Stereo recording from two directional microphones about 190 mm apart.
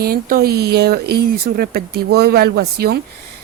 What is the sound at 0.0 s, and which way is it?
A woman's voice, 50° right (ahead or behind).